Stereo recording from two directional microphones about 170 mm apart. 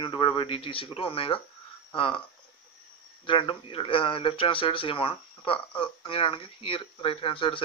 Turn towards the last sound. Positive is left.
turn(degrees=30)  # may be behind; listen again after turning